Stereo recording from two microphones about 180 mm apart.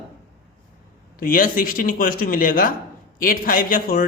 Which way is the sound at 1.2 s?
50° left (ahead or behind).